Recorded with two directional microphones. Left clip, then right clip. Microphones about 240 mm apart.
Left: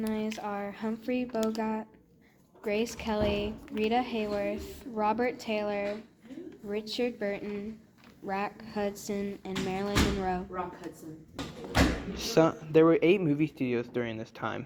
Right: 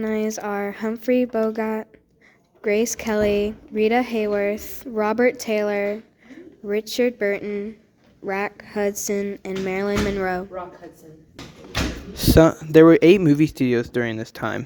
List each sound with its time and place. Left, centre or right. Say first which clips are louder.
0.0 s a woman's voice: right 10 dB; right
12.1 s speech: right 11 dB; right